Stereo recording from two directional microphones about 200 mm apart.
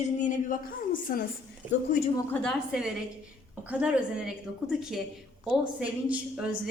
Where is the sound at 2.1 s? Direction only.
5° left (ahead or behind).